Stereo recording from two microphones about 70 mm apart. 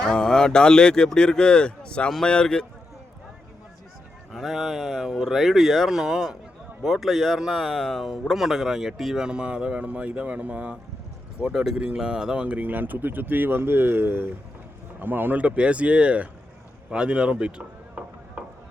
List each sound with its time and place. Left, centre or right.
0.0 s speech: centre
4.3 s speech: centre